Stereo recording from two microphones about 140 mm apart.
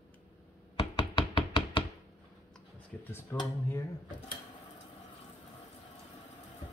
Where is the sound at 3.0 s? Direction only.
15° left (ahead or behind).